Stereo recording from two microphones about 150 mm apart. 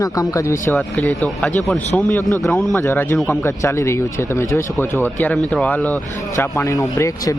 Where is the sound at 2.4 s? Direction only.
Centre (ahead or behind).